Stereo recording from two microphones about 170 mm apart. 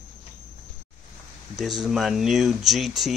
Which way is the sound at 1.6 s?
Centre (ahead or behind).